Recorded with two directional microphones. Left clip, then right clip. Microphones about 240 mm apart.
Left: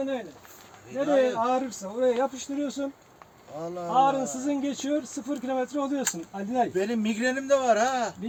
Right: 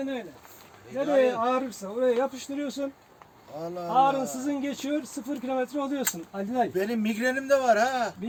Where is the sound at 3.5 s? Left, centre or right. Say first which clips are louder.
Even; centre.